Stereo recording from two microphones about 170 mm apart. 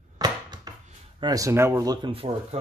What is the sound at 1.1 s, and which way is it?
Speech, 20° right (ahead or behind).